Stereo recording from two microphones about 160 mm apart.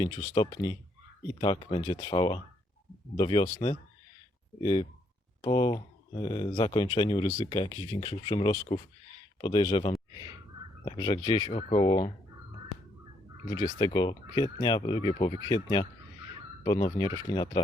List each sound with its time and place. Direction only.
0.0 s speech: 30° left (ahead or behind)
11.5 s speech: 40° left (ahead or behind)
13.5 s speech: 30° left (ahead or behind)